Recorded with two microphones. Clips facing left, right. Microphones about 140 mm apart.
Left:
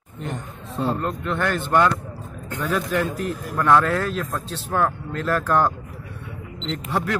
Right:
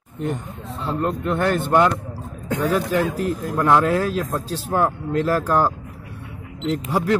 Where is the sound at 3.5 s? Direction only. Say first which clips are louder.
Even; 20° right (ahead or behind).